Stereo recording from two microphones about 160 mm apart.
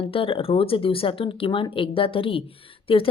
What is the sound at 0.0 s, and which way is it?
Speech, 35° left (ahead or behind).